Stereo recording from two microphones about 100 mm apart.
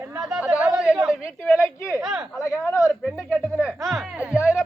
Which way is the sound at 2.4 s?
30° left (ahead or behind).